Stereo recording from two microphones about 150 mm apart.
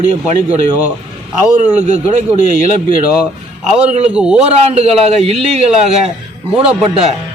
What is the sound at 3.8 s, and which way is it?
Speech, 45° right (ahead or behind).